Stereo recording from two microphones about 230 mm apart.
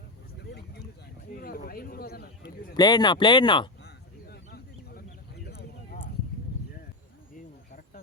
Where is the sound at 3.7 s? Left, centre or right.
Left.